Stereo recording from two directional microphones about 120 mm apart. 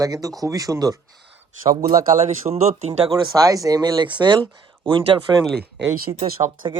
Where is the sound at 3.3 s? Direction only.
30° right (ahead or behind).